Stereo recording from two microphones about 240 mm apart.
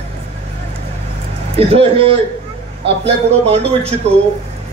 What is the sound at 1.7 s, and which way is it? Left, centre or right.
A man's voice, right.